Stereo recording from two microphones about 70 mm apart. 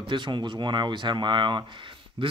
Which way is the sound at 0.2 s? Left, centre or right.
Right.